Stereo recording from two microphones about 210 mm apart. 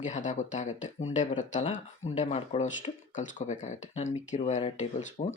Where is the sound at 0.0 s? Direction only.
35° left (ahead or behind).